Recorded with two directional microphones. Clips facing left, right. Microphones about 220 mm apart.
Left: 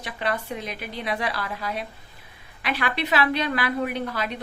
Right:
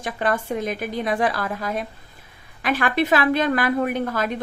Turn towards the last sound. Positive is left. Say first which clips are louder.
# right 5 dB
turn(degrees=-45)  # may be behind; listen again after turning